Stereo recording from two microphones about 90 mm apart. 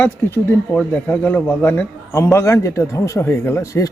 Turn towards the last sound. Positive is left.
turn(degrees=35)  # may be behind; listen again after turning